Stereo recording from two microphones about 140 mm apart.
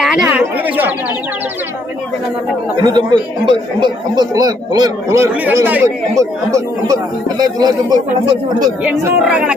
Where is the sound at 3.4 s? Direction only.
35° right (ahead or behind).